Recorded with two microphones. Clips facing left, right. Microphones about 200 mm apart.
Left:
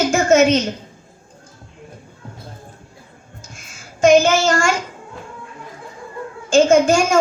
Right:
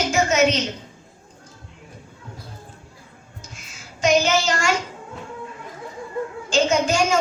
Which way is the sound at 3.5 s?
50° left (ahead or behind).